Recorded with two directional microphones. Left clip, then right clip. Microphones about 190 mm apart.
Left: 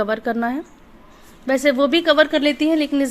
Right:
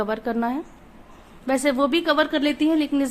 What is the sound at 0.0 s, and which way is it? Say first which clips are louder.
A woman's voice: left 4 dB; 10° left (ahead or behind).